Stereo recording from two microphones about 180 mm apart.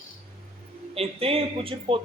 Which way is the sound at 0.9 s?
35° right (ahead or behind).